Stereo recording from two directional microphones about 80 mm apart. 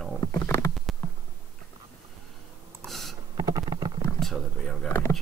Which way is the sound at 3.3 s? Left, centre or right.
Right.